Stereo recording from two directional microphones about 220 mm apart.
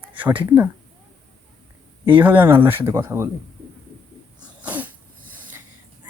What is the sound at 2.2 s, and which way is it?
Speech, 10° right (ahead or behind).